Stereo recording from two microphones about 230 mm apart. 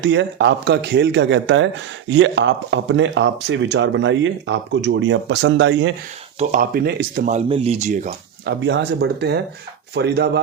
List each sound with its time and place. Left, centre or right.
0.0 s speech: right
6.4 s speech: right
7.3 s speech: right
8.4 s speech: right